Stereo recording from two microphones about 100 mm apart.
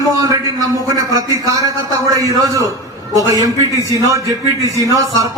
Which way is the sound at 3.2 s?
35° right (ahead or behind).